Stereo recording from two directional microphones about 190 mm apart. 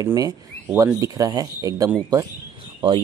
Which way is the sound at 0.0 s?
15° right (ahead or behind).